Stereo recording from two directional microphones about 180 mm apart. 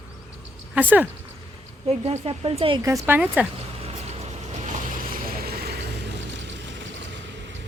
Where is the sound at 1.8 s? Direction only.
35° right (ahead or behind).